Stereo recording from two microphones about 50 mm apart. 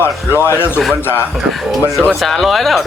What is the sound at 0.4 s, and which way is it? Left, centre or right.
Speech, left.